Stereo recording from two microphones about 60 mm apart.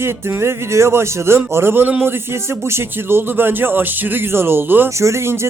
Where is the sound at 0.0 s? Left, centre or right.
Right.